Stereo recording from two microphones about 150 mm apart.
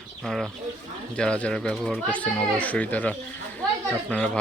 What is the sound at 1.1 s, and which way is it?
Speech, 5° left (ahead or behind).